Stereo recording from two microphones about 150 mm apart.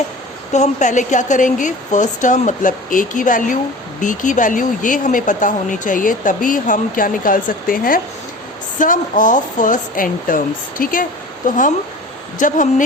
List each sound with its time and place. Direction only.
0.5 s speech: 50° left (ahead or behind)